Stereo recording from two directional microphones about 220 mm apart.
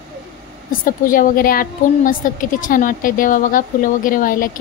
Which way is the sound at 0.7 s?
40° left (ahead or behind).